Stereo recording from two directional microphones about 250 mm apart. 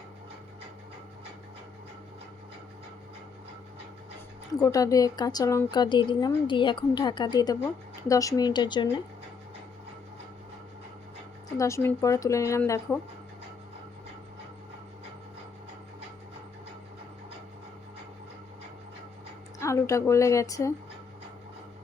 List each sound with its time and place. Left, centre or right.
4.5 s a woman's voice: centre
11.5 s a woman's voice: centre
19.5 s a woman's voice: centre